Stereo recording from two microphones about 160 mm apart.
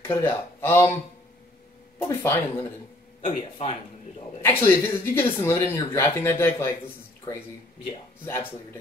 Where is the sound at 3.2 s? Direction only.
35° left (ahead or behind).